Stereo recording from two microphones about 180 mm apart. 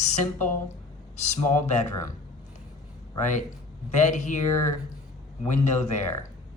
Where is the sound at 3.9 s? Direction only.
40° left (ahead or behind).